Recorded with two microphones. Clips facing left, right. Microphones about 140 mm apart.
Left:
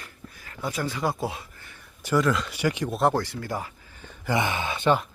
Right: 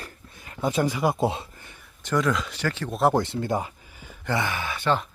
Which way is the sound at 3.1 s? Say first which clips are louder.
Right 4 dB; 25° right (ahead or behind).